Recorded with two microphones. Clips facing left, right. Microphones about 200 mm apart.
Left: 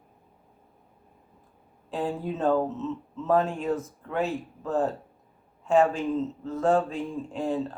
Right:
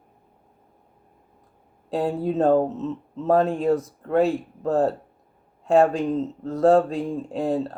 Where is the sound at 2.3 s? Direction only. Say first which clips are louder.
Right 6 dB; 40° right (ahead or behind).